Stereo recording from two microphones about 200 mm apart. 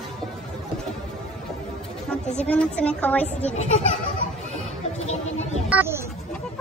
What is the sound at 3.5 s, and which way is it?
Speech, 35° left (ahead or behind).